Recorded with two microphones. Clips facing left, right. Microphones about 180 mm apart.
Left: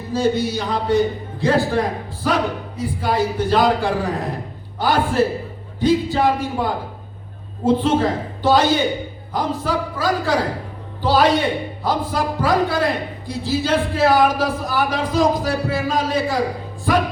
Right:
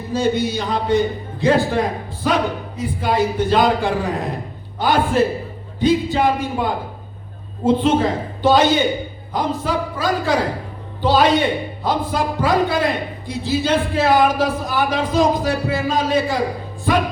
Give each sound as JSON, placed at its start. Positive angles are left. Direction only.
{"t": 0.1, "sound": "speech", "side_deg": -20}